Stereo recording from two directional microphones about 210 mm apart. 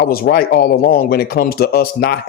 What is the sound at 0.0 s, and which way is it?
Speech, 45° left (ahead or behind).